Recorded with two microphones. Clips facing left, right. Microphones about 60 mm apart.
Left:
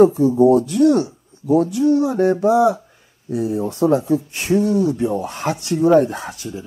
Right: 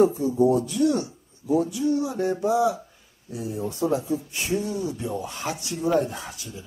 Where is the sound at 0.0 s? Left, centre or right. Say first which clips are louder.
Left 7 dB; left.